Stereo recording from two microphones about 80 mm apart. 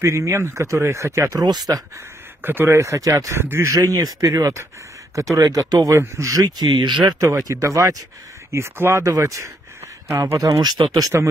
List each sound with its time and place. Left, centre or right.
0.0 s speech: right
2.4 s speech: right
3.7 s speech: right
5.9 s speech: right
7.2 s speech: right
9.0 s speech: right
10.6 s speech: right